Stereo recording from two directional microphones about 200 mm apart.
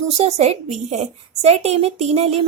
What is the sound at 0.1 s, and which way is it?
A woman's voice, 30° right (ahead or behind).